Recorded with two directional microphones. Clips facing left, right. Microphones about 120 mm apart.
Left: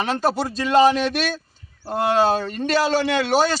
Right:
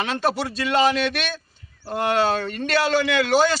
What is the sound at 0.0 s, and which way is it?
Speech, 40° left (ahead or behind).